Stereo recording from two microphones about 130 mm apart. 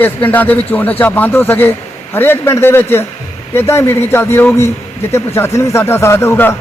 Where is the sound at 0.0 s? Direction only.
15° left (ahead or behind).